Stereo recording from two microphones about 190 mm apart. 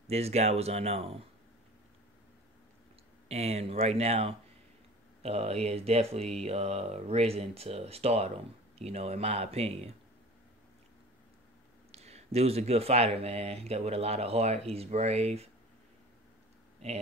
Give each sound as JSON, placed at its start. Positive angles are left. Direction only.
{"t": 0.0, "sound": "speech", "side_deg": -35}
{"t": 3.3, "sound": "speech", "side_deg": -35}
{"t": 11.9, "sound": "speech", "side_deg": -35}